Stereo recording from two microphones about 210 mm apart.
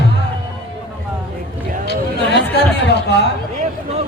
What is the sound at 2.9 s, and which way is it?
Chatter, 50° left (ahead or behind).